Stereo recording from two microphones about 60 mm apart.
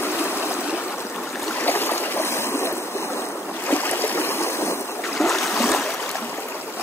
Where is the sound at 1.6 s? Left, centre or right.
Left.